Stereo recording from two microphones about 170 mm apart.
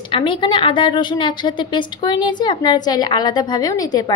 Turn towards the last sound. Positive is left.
turn(degrees=20)  # may be behind; listen again after turning